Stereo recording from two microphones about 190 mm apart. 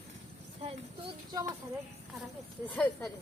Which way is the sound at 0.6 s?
25° right (ahead or behind).